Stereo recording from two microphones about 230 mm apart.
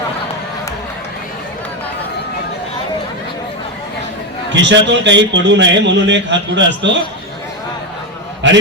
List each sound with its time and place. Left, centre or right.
4.5 s a man's voice: right
8.4 s a man's voice: right